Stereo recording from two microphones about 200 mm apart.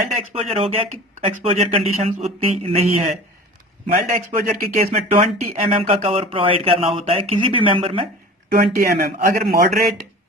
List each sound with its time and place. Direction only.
0.2 s speech: 30° right (ahead or behind)
4.4 s speech: 45° right (ahead or behind)
4.9 s speech: 30° right (ahead or behind)
8.4 s speech: 45° right (ahead or behind)